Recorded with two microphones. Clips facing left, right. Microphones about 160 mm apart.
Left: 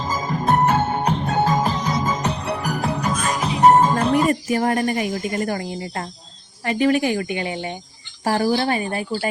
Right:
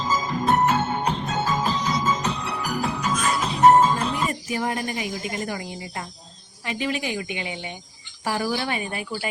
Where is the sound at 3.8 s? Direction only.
60° left (ahead or behind).